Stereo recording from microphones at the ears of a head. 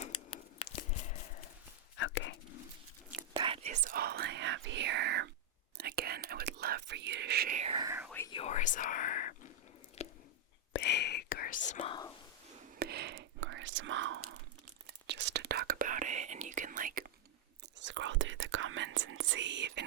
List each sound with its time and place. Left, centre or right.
0.0 s a sound: left
2.0 s whispering: left
3.3 s whispering: right
8.1 s whispering: left
10.7 s whispering: left
12.8 s whispering: right